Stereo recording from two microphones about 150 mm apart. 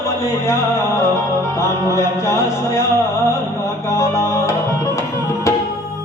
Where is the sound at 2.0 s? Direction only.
20° left (ahead or behind).